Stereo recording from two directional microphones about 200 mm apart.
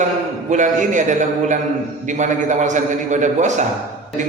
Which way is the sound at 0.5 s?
40° right (ahead or behind).